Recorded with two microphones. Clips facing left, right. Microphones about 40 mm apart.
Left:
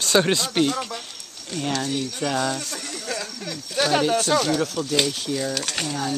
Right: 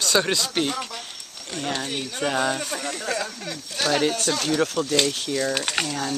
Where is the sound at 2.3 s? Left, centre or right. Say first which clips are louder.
Right 3 dB; right.